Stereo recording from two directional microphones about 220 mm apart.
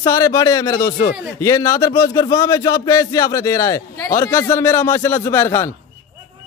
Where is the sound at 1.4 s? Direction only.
15° left (ahead or behind).